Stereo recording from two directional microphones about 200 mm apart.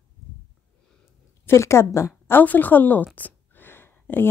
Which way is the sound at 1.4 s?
15° left (ahead or behind).